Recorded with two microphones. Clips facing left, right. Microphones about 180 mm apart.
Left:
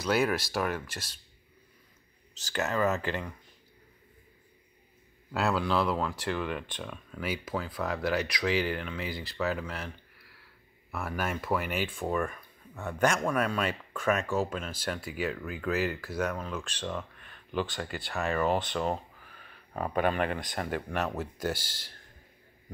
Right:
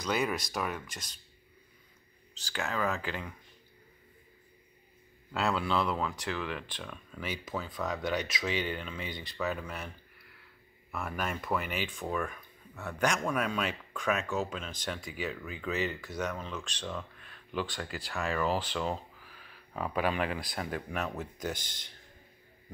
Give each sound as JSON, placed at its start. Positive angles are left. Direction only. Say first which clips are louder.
{"t": 0.0, "sound": "speech", "louder": "left 4 dB", "side_deg": 5}
{"t": 2.5, "sound": "speech", "louder": "left 5 dB", "side_deg": 5}
{"t": 5.3, "sound": "speech", "louder": "left 2 dB", "side_deg": 5}
{"t": 18.4, "sound": "speech", "louder": "left 3 dB", "side_deg": 45}
{"t": 20.2, "sound": "speech", "louder": "left 3 dB", "side_deg": -5}